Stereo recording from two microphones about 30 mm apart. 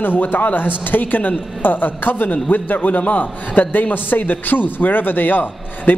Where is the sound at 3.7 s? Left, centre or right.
Left.